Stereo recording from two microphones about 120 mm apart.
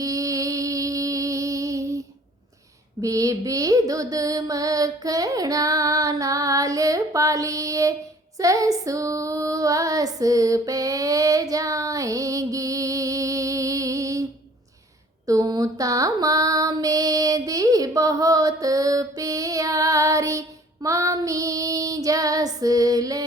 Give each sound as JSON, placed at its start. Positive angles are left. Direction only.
{"t": 0.0, "sound": "music", "side_deg": -25}
{"t": 3.0, "sound": "a sound", "side_deg": -30}
{"t": 8.4, "sound": "female singing", "side_deg": -30}
{"t": 15.3, "sound": "female singing", "side_deg": -30}
{"t": 20.8, "sound": "child singing", "side_deg": -25}
{"t": 22.6, "sound": "female singing", "side_deg": -30}